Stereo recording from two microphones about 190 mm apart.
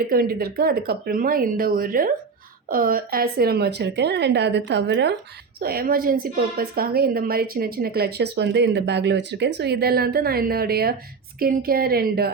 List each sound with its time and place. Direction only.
0.1 s a woman's voice: 50° right (ahead or behind)
5.5 s a woman's voice: 50° right (ahead or behind)